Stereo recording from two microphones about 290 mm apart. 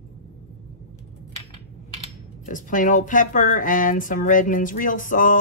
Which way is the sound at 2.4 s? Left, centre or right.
Left.